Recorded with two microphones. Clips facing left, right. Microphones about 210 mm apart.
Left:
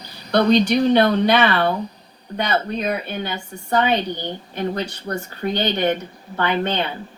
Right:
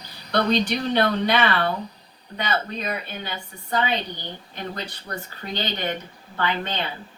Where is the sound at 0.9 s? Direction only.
60° left (ahead or behind).